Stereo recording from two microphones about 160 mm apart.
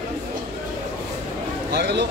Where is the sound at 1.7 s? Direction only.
90° right.